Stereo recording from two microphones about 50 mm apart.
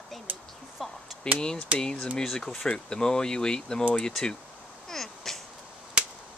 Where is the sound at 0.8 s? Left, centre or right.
Centre.